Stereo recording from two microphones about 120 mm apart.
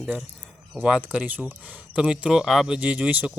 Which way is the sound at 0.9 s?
10° right (ahead or behind).